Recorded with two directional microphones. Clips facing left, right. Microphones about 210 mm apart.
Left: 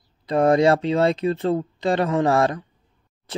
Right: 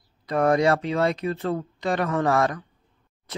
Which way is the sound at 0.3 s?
25° left (ahead or behind).